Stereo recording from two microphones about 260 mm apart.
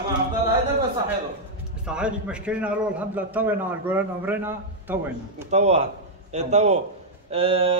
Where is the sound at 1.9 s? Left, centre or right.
Centre.